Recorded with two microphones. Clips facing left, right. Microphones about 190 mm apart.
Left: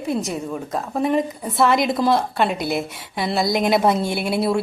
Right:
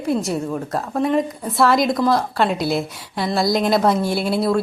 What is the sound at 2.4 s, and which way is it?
Speech, centre (ahead or behind).